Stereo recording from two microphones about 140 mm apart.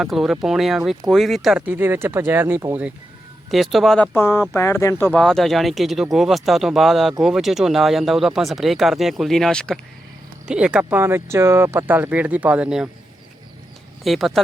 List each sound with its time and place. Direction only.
0.0 s speech: centre (ahead or behind); by 2.7 s 20° right (ahead or behind)
3.5 s speech: centre (ahead or behind); by 5.2 s 15° left (ahead or behind)
5.2 s speech: 5° left (ahead or behind)
10.4 s speech: 5° right (ahead or behind)
14.0 s speech: centre (ahead or behind)